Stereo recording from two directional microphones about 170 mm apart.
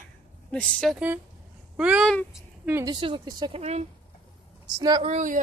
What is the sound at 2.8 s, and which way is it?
Speech, 25° right (ahead or behind).